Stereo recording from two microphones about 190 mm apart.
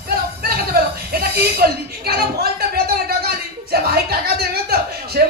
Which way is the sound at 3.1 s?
55° right (ahead or behind).